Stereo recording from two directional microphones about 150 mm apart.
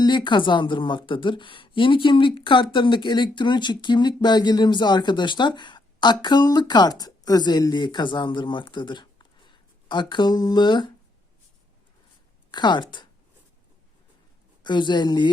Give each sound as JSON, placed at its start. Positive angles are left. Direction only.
{"t": 0.0, "sound": "a woman's voice", "side_deg": 30}
{"t": 12.5, "sound": "a woman's voice", "side_deg": 30}
{"t": 14.6, "sound": "a woman's voice", "side_deg": 30}